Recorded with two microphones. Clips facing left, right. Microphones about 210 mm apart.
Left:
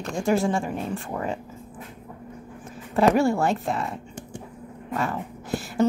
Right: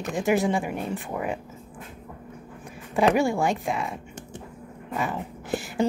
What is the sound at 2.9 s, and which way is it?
Speech, centre (ahead or behind).